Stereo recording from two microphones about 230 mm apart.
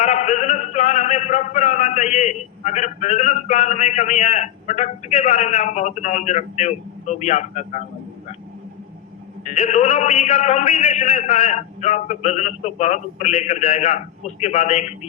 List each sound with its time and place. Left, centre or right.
0.0 s a man's voice: left
9.4 s a man's voice: left